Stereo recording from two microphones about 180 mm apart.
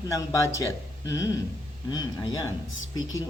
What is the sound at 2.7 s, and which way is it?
Speech, 90° left.